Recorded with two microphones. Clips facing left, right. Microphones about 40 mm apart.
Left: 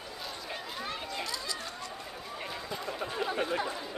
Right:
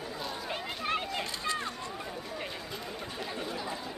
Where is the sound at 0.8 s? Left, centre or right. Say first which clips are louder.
Right 6 dB; right.